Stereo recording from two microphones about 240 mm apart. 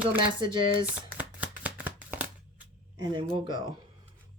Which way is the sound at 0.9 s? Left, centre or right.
Centre.